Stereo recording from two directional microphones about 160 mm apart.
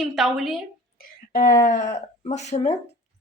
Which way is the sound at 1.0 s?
65° left (ahead or behind).